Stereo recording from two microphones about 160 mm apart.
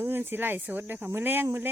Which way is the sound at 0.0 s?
15° right (ahead or behind).